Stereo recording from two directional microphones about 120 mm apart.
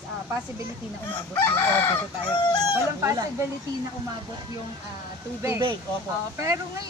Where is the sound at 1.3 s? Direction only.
20° left (ahead or behind).